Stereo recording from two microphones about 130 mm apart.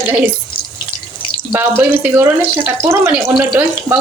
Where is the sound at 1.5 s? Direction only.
15° right (ahead or behind).